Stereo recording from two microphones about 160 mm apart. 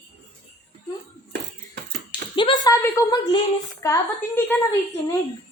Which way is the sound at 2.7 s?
20° left (ahead or behind).